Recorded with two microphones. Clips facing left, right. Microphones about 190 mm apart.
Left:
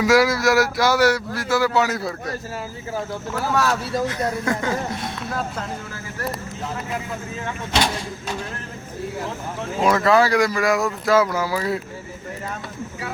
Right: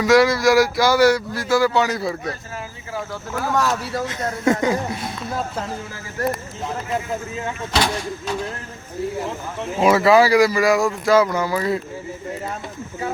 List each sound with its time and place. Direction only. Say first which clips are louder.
0.0 s speech: right 2 dB; 5° left (ahead or behind)
3.5 s speech: even; 15° right (ahead or behind)
9.8 s speech: right 3 dB; 10° right (ahead or behind)